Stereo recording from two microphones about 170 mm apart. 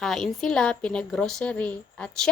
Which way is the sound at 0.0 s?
Centre (ahead or behind).